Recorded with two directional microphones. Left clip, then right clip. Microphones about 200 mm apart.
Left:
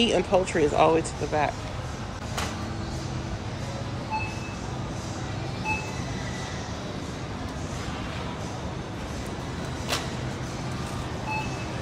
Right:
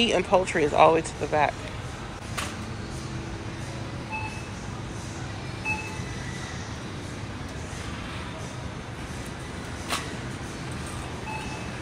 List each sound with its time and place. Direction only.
0.0 s speech: 10° left (ahead or behind)